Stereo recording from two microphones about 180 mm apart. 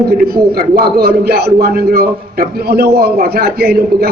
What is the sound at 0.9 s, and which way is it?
Speech, 60° right (ahead or behind).